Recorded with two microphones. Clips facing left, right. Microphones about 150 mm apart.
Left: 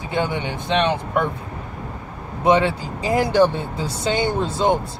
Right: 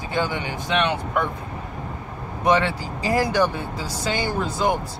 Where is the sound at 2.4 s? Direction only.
25° left (ahead or behind).